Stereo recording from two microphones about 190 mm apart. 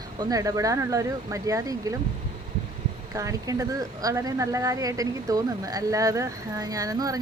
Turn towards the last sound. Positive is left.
turn(degrees=-20)  # may be behind; listen again after turning